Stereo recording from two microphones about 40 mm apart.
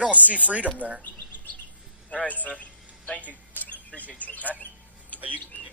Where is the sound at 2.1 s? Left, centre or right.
Left.